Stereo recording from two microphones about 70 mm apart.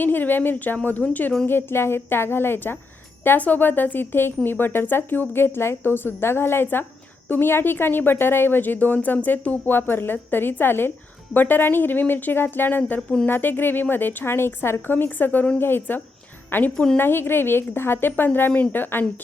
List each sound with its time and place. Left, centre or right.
0.0 s speech: left
1.5 s a woman's voice: left
13.0 s speech: centre
13.2 s a woman's voice: left
16.7 s speech: centre
17.0 s a woman's voice: left